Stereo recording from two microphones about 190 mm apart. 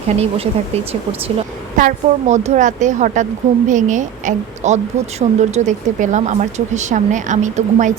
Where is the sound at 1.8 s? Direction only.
40° right (ahead or behind).